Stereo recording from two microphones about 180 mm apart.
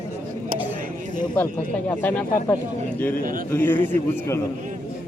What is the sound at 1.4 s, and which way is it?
Speech, 10° left (ahead or behind).